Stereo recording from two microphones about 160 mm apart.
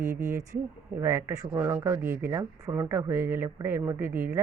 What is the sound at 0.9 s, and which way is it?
Speech, 15° right (ahead or behind).